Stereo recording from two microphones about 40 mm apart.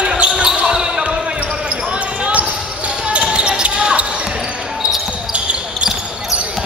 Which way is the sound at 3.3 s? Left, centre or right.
Right.